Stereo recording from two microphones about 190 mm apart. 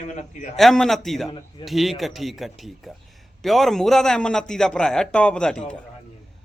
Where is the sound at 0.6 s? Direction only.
Centre (ahead or behind).